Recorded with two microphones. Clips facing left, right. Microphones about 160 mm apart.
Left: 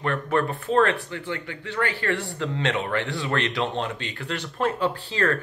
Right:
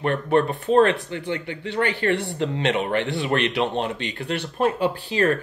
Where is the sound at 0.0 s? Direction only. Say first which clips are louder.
Right 4 dB; 20° right (ahead or behind).